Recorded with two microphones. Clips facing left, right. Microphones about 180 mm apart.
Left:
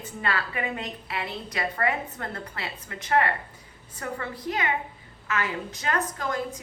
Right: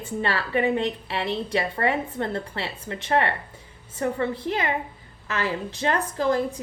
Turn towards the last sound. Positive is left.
turn(degrees=-30)  # may be behind; listen again after turning